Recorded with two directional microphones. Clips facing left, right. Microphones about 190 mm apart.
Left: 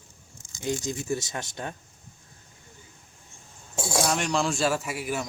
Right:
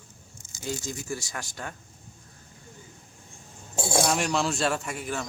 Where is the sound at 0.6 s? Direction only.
20° left (ahead or behind).